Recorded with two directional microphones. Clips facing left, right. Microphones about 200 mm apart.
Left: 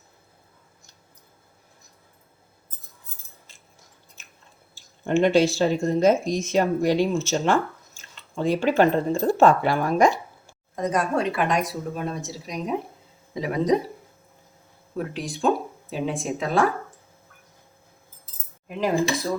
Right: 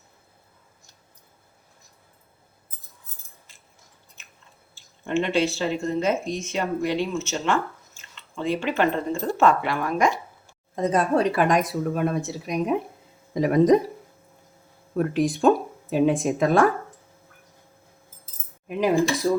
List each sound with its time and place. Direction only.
5.0 s speech: 40° left (ahead or behind)
10.8 s a woman's voice: 25° right (ahead or behind); by 12.5 s 55° right (ahead or behind)
13.3 s a woman's voice: 45° right (ahead or behind)
14.9 s speech: 50° right (ahead or behind)
18.7 s cutlery: 15° right (ahead or behind)